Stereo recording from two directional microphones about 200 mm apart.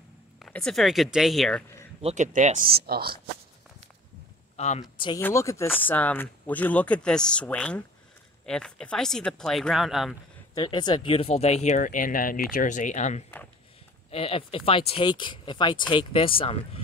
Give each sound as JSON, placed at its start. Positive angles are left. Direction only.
{"t": 0.4, "sound": "speech", "side_deg": 5}
{"t": 2.0, "sound": "speech", "side_deg": -35}
{"t": 4.6, "sound": "speech", "side_deg": 35}
{"t": 4.8, "sound": "speech", "side_deg": 20}
{"t": 10.5, "sound": "speech", "side_deg": 20}